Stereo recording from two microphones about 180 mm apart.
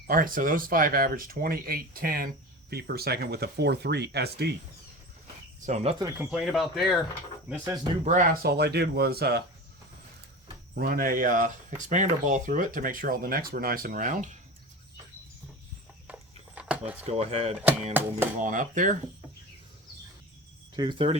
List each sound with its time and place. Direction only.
0.1 s speech: 50° right (ahead or behind)
5.6 s speech: 40° right (ahead or behind)
6.0 s speech: 20° right (ahead or behind)
6.3 s speech: centre (ahead or behind)
8.0 s speech: 50° right (ahead or behind)
10.8 s speech: 55° right (ahead or behind)
16.0 s a sound: 5° right (ahead or behind)
17.0 s speech: 35° right (ahead or behind)
17.6 s music: 10° right (ahead or behind)
18.3 s speech: 45° right (ahead or behind)
20.7 s speech: 25° right (ahead or behind)